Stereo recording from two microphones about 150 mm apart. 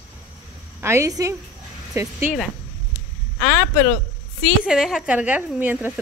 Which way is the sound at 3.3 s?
10° left (ahead or behind).